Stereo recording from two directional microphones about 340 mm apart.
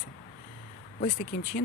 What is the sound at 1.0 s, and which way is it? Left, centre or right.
Speech, left.